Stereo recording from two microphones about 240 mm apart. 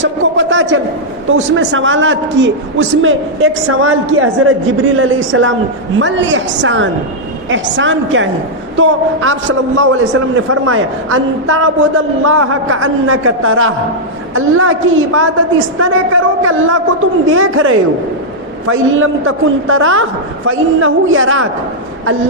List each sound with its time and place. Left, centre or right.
0.0 s a sound: right
1.3 s a man's voice: right
9.7 s a man's voice: right